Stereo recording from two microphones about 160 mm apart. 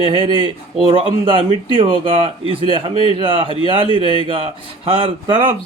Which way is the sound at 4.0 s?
30° left (ahead or behind).